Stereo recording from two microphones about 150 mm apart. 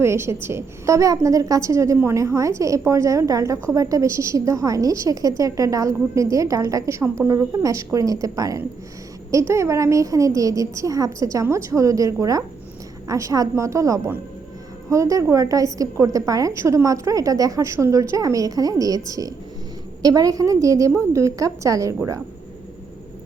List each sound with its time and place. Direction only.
0.0 s a woman's voice: 15° right (ahead or behind)